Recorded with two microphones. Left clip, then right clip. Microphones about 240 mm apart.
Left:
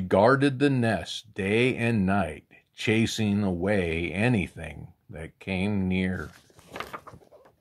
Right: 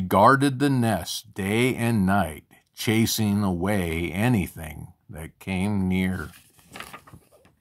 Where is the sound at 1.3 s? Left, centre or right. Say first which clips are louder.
Even; centre.